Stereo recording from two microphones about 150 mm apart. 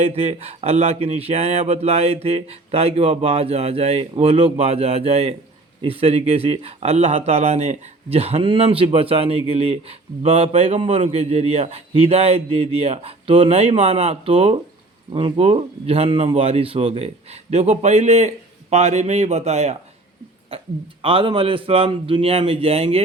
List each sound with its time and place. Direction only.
0.0 s a man's voice: 45° right (ahead or behind)
20.5 s a sound: 40° right (ahead or behind)
21.0 s speech: 35° right (ahead or behind)